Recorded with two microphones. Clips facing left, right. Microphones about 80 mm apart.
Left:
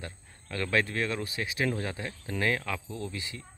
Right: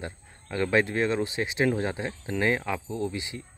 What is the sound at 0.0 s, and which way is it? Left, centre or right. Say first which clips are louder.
Speech: right 5 dB; right.